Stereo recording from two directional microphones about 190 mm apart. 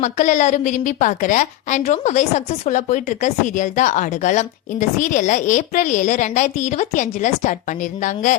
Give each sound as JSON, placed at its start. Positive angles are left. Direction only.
{"t": 0.0, "sound": "a woman's voice", "side_deg": 40}